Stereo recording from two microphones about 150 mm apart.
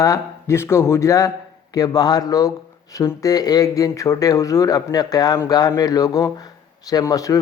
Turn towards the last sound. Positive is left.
turn(degrees=25)  # may be behind; listen again after turning